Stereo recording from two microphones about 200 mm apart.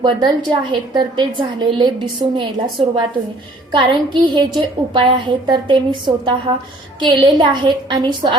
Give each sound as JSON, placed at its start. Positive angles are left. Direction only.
{"t": 0.0, "sound": "a woman's voice", "side_deg": -20}